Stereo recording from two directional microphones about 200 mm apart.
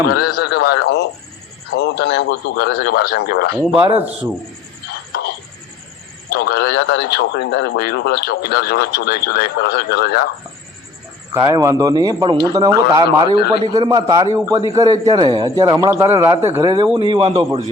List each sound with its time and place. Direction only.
0.2 s speech: 50° left (ahead or behind)
3.8 s a man's voice: 25° right (ahead or behind)
6.3 s speech: 55° left (ahead or behind)
11.3 s a man's voice: 15° right (ahead or behind)